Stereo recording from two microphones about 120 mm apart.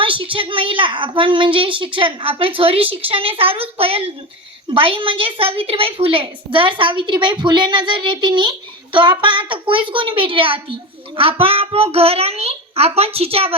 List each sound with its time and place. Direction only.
0.0 s a woman's voice: 45° right (ahead or behind)